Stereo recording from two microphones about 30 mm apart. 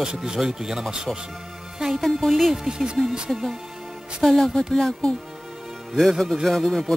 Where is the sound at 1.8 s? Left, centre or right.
Centre.